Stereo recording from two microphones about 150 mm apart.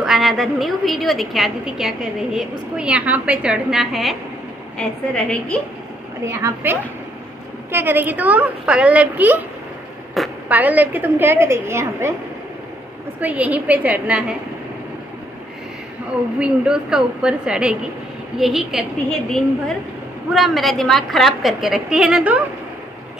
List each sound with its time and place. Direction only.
0.0 s a woman's voice: centre (ahead or behind)
6.2 s a woman's voice: 15° right (ahead or behind)
10.2 s a woman's voice: centre (ahead or behind)
10.5 s a woman's voice: 10° right (ahead or behind)
13.2 s a woman's voice: 10° right (ahead or behind)
16.3 s a woman's voice: 5° right (ahead or behind)
20.3 s a woman's voice: centre (ahead or behind)